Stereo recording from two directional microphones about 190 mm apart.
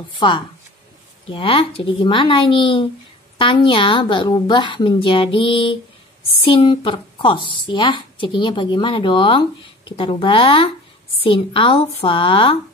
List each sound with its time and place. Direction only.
0.1 s a woman's voice: 25° left (ahead or behind)